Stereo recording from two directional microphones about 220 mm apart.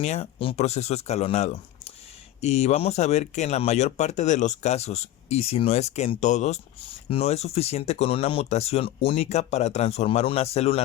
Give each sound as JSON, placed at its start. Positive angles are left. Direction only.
{"t": 0.0, "sound": "speech", "side_deg": 30}